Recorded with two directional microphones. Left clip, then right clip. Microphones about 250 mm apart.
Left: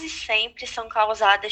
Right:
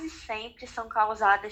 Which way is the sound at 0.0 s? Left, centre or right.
Left.